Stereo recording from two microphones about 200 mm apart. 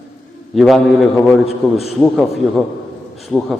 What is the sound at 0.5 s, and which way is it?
A man's voice, centre (ahead or behind).